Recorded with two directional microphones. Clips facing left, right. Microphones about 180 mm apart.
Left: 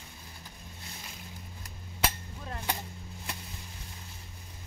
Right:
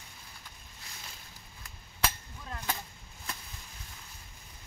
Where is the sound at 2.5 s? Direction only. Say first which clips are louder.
Left 1 dB; 25° left (ahead or behind).